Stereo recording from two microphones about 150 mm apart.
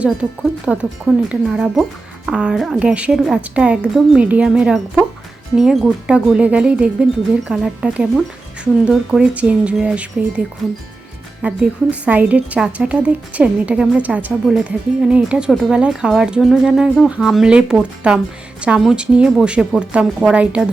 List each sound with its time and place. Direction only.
0.0 s a woman's voice: 5° right (ahead or behind)